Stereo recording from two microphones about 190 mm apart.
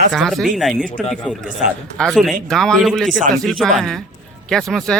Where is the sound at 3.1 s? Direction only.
45° right (ahead or behind).